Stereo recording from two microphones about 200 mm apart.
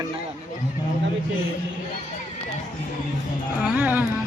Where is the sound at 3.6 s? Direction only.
10° right (ahead or behind).